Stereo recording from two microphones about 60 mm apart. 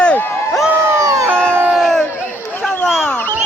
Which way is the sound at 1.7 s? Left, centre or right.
Centre.